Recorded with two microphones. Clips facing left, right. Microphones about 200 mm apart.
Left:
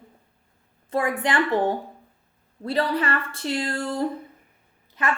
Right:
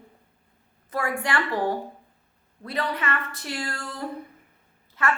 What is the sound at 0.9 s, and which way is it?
A woman's voice, 20° left (ahead or behind).